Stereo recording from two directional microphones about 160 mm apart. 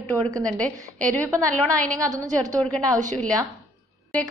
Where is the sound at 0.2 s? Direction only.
25° right (ahead or behind).